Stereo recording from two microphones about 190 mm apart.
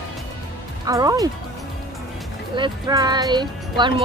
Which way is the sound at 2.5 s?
20° right (ahead or behind).